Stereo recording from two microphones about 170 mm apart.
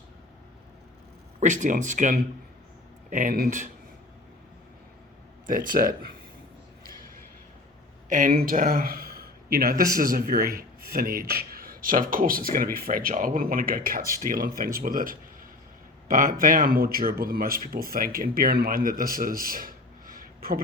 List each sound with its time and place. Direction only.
1.4 s speech: 45° right (ahead or behind)
5.5 s speech: 55° right (ahead or behind)
8.1 s speech: 55° right (ahead or behind)